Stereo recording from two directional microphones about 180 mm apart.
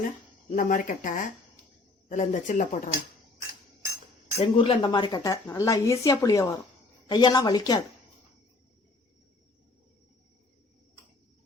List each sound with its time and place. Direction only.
0.5 s speech: 50° left (ahead or behind)
4.4 s a woman's voice: 30° left (ahead or behind)